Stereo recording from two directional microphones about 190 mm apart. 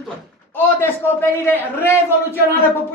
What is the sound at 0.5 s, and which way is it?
A man's voice, 10° left (ahead or behind).